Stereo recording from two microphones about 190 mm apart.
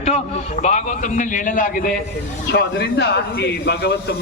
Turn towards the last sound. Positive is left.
turn(degrees=60)  # may be behind; listen again after turning